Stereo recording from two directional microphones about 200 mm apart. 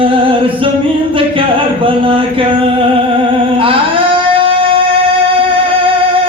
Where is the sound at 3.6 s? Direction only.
25° right (ahead or behind).